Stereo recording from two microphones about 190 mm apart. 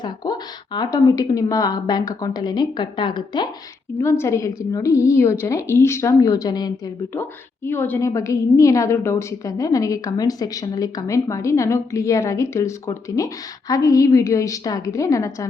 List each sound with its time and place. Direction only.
0.0 s a woman's voice: 20° left (ahead or behind)